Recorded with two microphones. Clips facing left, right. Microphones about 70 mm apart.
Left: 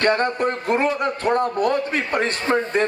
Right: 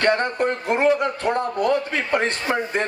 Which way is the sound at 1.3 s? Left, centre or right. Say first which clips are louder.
Left 2 dB; left.